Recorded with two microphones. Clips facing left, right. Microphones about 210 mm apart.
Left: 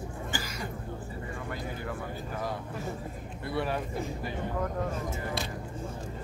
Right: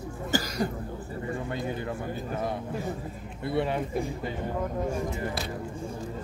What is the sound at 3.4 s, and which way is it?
Speech, 25° right (ahead or behind).